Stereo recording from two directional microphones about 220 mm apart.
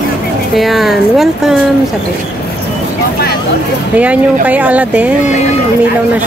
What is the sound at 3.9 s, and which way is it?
Speech, 5° right (ahead or behind).